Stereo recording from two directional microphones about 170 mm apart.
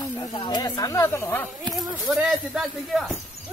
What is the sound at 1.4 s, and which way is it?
Speech, centre (ahead or behind).